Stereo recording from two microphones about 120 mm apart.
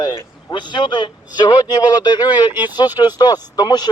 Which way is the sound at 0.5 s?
40° left (ahead or behind).